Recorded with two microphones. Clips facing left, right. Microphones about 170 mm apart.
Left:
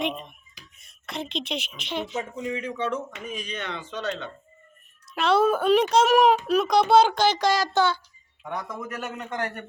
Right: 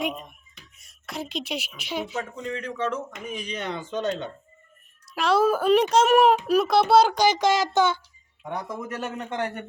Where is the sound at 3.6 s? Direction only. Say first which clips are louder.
Right 5 dB; 45° right (ahead or behind).